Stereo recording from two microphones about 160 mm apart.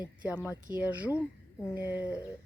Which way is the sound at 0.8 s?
10° right (ahead or behind).